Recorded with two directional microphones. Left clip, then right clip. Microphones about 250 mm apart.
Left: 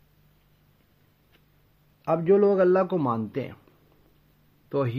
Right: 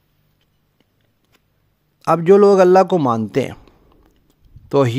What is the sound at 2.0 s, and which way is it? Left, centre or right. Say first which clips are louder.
Speech: right 10 dB; right.